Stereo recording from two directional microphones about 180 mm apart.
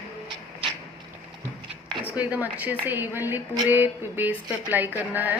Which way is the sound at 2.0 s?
10° right (ahead or behind).